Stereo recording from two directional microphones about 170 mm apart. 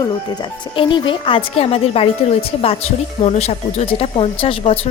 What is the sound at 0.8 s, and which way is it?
Speech, 30° left (ahead or behind).